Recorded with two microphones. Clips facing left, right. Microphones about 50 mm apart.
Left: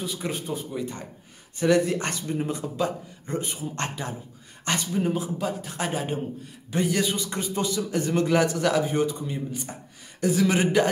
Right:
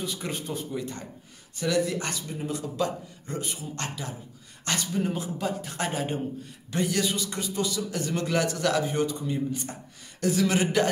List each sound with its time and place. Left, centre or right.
0.0 s a man's voice: centre
1.6 s a man's voice: left
4.6 s a man's voice: centre